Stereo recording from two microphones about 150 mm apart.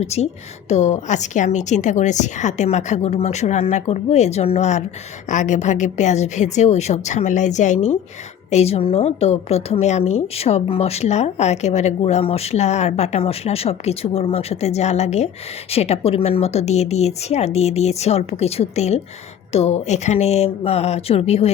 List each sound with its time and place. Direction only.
0.0 s a woman's voice: 45° left (ahead or behind)